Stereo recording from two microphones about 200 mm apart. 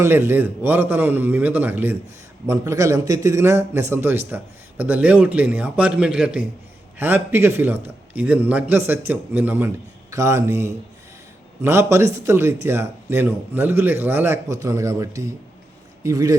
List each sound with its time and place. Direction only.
0.0 s a man's voice: 10° right (ahead or behind)